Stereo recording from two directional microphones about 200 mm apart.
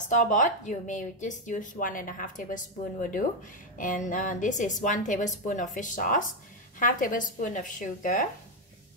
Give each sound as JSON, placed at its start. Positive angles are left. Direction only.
{"t": 0.1, "sound": "a woman's voice", "side_deg": 40}